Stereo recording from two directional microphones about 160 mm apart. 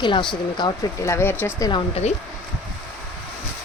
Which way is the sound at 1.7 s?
40° left (ahead or behind).